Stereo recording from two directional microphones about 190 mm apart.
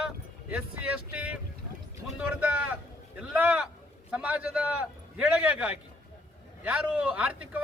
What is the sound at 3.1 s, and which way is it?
A man's voice, 5° right (ahead or behind).